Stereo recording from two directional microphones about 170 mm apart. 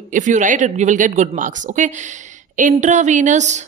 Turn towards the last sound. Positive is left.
turn(degrees=-45)  # may be behind; listen again after turning